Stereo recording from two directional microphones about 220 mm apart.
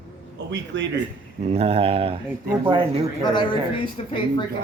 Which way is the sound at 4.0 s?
30° left (ahead or behind).